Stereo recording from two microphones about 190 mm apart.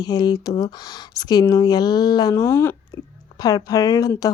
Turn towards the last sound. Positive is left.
turn(degrees=20)  # may be behind; listen again after turning